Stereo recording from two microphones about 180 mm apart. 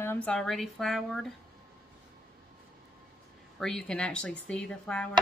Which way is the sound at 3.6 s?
5° left (ahead or behind).